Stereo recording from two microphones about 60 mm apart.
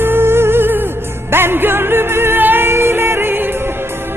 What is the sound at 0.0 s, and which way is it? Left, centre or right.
Music, right.